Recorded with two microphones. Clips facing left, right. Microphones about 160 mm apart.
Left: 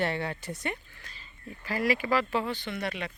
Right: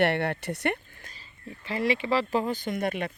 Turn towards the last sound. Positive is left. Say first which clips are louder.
# right 5 dB
turn(degrees=-50)  # may be behind; listen again after turning